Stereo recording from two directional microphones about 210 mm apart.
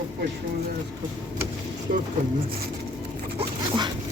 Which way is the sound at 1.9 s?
45° right (ahead or behind).